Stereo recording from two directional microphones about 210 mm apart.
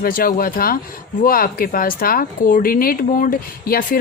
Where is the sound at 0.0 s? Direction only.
45° left (ahead or behind).